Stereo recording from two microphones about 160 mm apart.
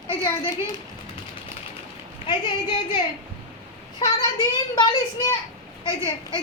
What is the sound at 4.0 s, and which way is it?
A child's voice, 20° left (ahead or behind).